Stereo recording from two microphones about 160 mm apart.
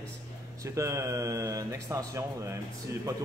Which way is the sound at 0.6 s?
20° right (ahead or behind).